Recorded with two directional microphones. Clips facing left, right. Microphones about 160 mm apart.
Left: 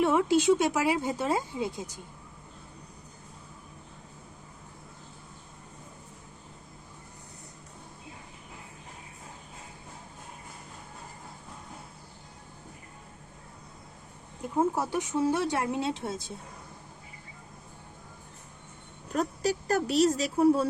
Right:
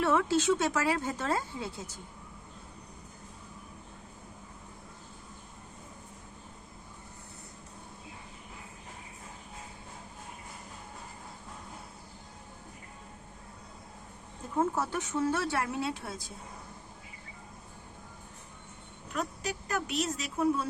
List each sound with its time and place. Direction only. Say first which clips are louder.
0.0 s speech: left 4 dB; 15° left (ahead or behind)
14.5 s speech: left 3 dB; 15° left (ahead or behind)
19.1 s speech: left 7 dB; 35° left (ahead or behind)